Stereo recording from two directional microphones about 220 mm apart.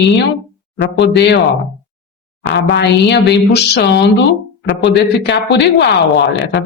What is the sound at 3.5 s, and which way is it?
A woman's voice, 50° left (ahead or behind).